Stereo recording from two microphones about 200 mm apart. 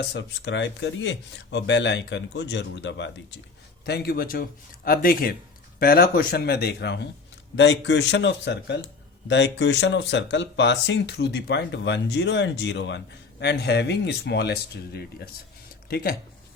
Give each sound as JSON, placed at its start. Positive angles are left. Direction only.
{"t": 0.0, "sound": "speech", "side_deg": 60}
{"t": 3.8, "sound": "speech", "side_deg": 50}